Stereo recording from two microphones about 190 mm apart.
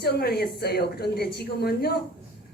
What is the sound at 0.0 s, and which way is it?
A man's voice, 55° left (ahead or behind).